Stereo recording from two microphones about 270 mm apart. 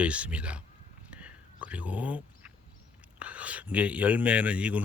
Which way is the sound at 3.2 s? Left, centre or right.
Centre.